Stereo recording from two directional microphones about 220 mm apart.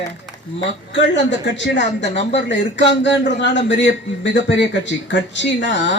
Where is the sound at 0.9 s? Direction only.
55° left (ahead or behind).